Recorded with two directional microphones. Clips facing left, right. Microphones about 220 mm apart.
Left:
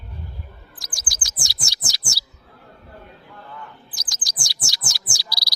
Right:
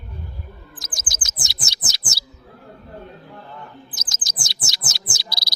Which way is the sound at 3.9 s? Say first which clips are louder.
Right 2 dB; 20° right (ahead or behind).